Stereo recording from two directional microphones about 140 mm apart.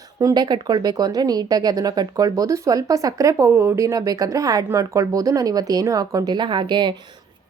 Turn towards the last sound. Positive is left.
turn(degrees=-35)  # may be behind; listen again after turning